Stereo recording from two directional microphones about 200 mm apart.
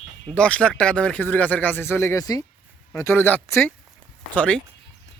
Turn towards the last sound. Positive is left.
turn(degrees=5)  # may be behind; listen again after turning